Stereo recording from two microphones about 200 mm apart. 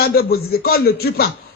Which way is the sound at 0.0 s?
50° left (ahead or behind).